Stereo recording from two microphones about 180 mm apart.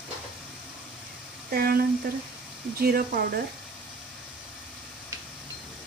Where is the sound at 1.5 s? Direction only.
60° right (ahead or behind).